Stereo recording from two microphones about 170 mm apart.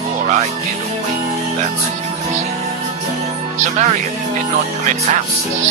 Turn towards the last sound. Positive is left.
turn(degrees=-45)  # may be behind; listen again after turning